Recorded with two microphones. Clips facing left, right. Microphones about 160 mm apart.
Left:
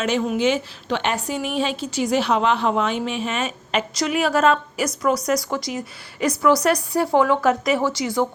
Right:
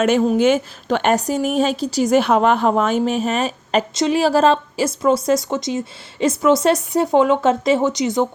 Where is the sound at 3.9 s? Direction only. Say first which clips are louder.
Right 4 dB; 25° right (ahead or behind).